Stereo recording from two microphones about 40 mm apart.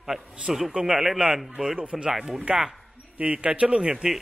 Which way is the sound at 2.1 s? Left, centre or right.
Centre.